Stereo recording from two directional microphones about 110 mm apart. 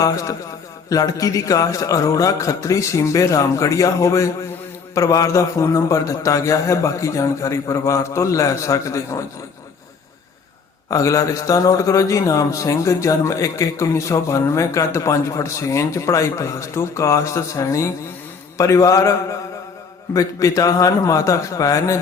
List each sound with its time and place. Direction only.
0.0 s a man's voice: 30° left (ahead or behind)
10.8 s a man's voice: 30° left (ahead or behind)
20.1 s a man's voice: 30° left (ahead or behind)